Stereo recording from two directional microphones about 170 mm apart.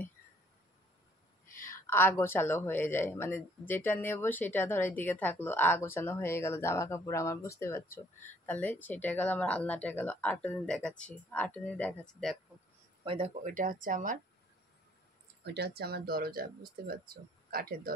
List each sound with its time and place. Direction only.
1.5 s speech: 15° left (ahead or behind)
13.0 s speech: 30° right (ahead or behind)
13.3 s speech: 50° right (ahead or behind)
15.4 s speech: 75° right (ahead or behind); by 17.9 s 60° right (ahead or behind)